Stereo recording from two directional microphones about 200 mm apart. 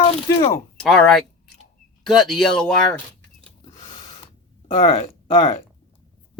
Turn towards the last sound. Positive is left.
turn(degrees=30)  # may be behind; listen again after turning